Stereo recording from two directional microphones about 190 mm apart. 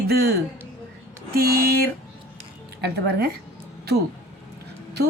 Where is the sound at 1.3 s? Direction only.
50° right (ahead or behind).